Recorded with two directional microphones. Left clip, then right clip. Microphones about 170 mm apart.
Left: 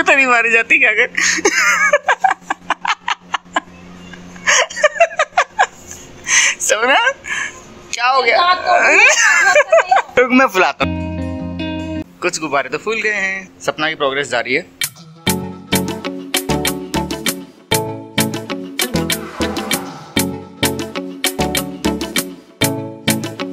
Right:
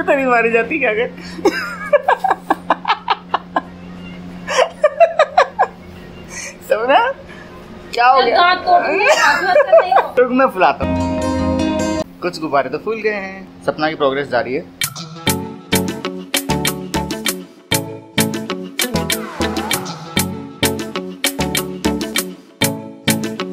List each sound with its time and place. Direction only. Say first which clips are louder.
0.0 s whimper: left 2 dB; 20° left (ahead or behind)
4.5 s a sound: left 1 dB; 15° left (ahead or behind)
7.9 s speech: right 2 dB; 10° left (ahead or behind)
10.9 s music: right 6 dB; centre (ahead or behind)
12.2 s speech: left 2 dB; 10° left (ahead or behind)
14.8 s music: right 1 dB; centre (ahead or behind)